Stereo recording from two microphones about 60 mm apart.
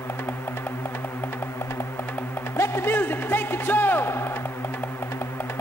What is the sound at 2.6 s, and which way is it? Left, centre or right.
A man's voice, left.